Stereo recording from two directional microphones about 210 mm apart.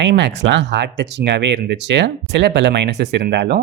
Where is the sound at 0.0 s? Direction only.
55° right (ahead or behind).